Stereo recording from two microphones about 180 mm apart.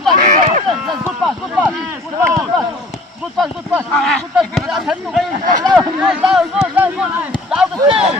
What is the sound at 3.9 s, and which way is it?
Speech, centre (ahead or behind).